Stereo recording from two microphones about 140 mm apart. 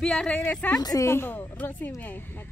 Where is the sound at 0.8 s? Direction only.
25° left (ahead or behind).